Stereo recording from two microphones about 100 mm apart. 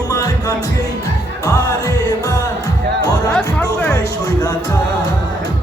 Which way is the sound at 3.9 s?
40° left (ahead or behind).